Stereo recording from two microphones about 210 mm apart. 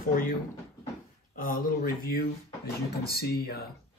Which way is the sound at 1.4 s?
40° left (ahead or behind).